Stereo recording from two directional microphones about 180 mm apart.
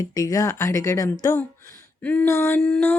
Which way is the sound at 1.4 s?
15° left (ahead or behind).